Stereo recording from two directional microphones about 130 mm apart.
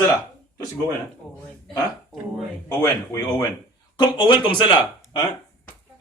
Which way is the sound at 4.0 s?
35° left (ahead or behind).